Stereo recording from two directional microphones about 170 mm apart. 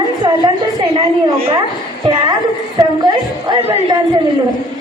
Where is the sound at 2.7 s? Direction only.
25° right (ahead or behind).